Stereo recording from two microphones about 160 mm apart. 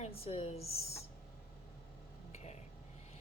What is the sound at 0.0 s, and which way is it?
Speech, 35° left (ahead or behind).